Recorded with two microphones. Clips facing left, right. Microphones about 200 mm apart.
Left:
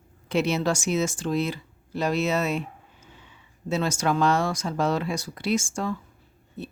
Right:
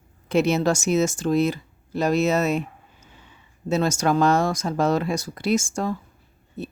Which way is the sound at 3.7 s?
45° right (ahead or behind).